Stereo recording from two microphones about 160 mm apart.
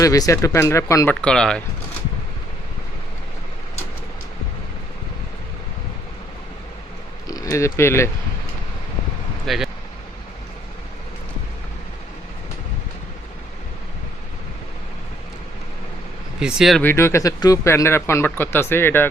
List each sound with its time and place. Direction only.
0.0 s speech: 20° left (ahead or behind)
1.2 s speech: 5° left (ahead or behind)
7.3 s speech: 20° left (ahead or behind)
9.5 s speech: centre (ahead or behind)
16.4 s speech: 5° right (ahead or behind)
16.8 s speech: 15° left (ahead or behind)